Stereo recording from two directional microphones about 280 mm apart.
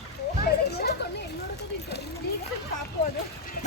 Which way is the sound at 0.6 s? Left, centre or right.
Left.